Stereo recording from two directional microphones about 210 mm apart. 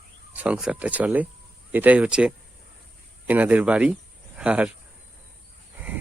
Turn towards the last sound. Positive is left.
turn(degrees=-5)  # may be behind; listen again after turning